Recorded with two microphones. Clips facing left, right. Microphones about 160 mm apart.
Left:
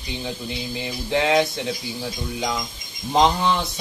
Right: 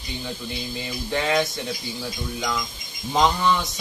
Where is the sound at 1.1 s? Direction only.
15° left (ahead or behind).